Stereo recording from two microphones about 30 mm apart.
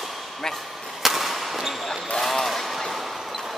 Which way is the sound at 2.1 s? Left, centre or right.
Centre.